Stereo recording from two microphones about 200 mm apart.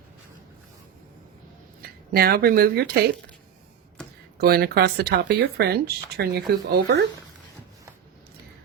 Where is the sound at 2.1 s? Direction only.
50° right (ahead or behind).